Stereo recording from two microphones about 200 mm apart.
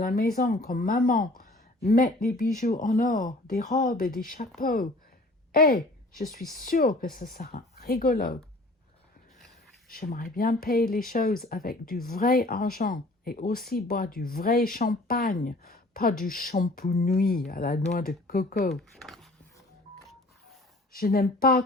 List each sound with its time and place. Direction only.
0.0 s a woman's voice: 45° left (ahead or behind)
9.9 s speech: 50° left (ahead or behind)
18.7 s speech: centre (ahead or behind)
20.9 s speech: 50° left (ahead or behind)